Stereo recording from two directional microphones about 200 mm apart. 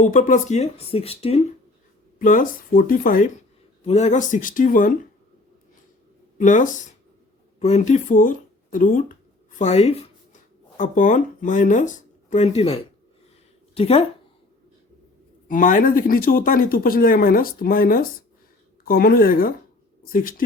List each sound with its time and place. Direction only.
0.0 s speech: 40° left (ahead or behind)
2.1 s speech: 40° left (ahead or behind)
3.8 s speech: 35° left (ahead or behind)
6.4 s speech: 40° left (ahead or behind)
15.4 s speech: 40° left (ahead or behind)